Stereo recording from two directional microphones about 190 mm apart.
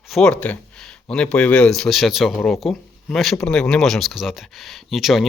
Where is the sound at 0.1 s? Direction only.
5° left (ahead or behind).